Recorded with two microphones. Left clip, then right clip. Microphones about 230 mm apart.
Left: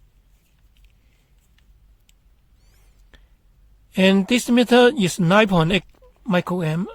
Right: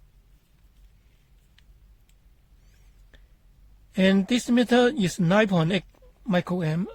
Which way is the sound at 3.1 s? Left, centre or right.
Left.